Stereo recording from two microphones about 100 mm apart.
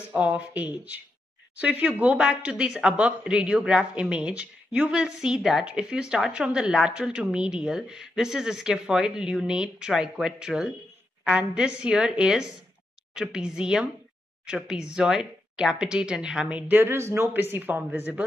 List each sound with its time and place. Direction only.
0.1 s speech: 15° right (ahead or behind)